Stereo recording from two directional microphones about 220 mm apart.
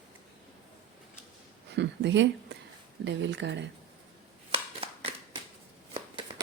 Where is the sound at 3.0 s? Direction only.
55° right (ahead or behind).